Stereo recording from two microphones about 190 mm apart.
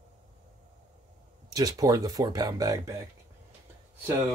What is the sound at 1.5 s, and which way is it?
Speech, 20° right (ahead or behind).